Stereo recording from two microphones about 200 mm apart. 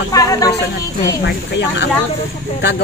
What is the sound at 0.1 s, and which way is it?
Speech, 15° left (ahead or behind).